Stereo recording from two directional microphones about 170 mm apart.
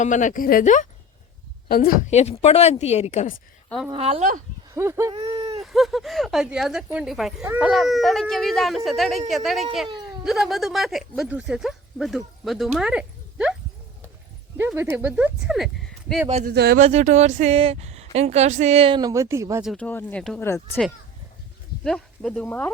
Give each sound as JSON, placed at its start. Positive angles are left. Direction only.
{"t": 0.0, "sound": "a woman's voice", "side_deg": 45}
{"t": 2.0, "sound": "a woman's voice", "side_deg": 40}
{"t": 3.9, "sound": "speech", "side_deg": -35}
{"t": 4.7, "sound": "speech", "side_deg": -15}
{"t": 5.1, "sound": "a sound", "side_deg": -30}
{"t": 5.6, "sound": "speech", "side_deg": 0}
{"t": 14.8, "sound": "speech", "side_deg": -10}
{"t": 16.5, "sound": "speech", "side_deg": -65}
{"t": 16.8, "sound": "speech", "side_deg": -45}
{"t": 19.7, "sound": "speech", "side_deg": 10}
{"t": 21.8, "sound": "speech", "side_deg": 5}